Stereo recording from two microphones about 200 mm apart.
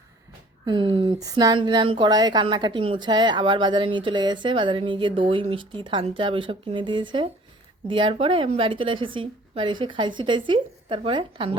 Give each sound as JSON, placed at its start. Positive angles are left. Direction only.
{"t": 0.6, "sound": "speech", "side_deg": -25}